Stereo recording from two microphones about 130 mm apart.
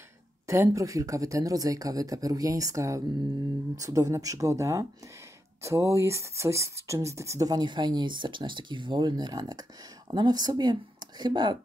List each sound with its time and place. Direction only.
0.5 s speech: 25° right (ahead or behind)